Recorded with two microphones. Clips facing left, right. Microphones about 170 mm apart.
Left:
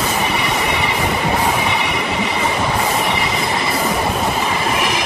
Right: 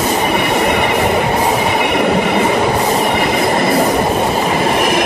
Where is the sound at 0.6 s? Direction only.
55° right (ahead or behind).